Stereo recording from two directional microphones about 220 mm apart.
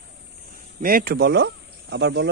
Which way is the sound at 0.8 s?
45° right (ahead or behind).